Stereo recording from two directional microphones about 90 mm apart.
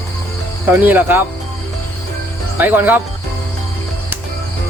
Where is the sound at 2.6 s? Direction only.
20° right (ahead or behind).